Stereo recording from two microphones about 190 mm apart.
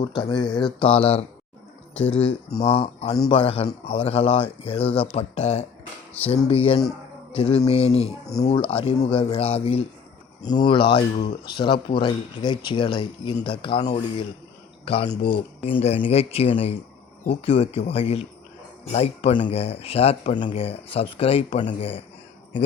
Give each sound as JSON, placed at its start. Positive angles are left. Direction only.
{"t": 0.2, "sound": "speech", "side_deg": 25}